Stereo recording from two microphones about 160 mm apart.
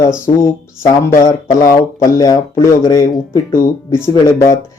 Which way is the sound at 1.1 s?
20° left (ahead or behind).